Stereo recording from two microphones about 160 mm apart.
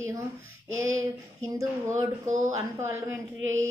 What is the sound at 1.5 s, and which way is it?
Speech, 20° right (ahead or behind).